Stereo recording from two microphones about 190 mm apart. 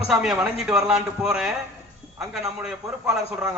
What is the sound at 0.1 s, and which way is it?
A man's voice, 5° right (ahead or behind).